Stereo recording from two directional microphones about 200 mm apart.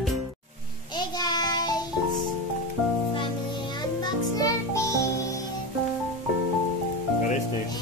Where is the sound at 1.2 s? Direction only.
20° left (ahead or behind).